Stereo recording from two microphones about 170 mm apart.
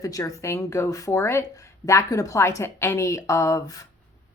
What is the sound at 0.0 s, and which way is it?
Speech, 20° left (ahead or behind).